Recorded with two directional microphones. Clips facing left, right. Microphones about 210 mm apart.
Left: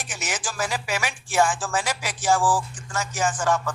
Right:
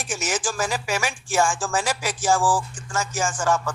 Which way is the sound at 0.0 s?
45° right (ahead or behind).